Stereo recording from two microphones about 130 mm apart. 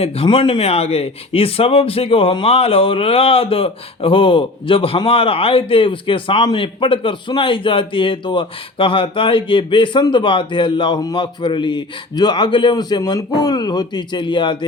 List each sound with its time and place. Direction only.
0.0 s speech: 45° left (ahead or behind)